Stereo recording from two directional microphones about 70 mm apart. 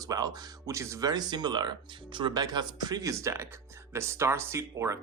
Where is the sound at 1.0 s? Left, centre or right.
Right.